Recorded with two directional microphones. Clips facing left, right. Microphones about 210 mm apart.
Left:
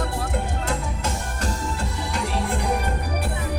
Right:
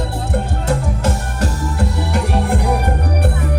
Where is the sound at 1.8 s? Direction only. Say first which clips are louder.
Right 8 dB; 65° right (ahead or behind).